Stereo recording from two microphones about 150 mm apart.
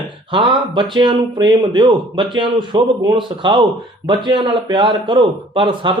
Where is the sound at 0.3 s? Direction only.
35° right (ahead or behind).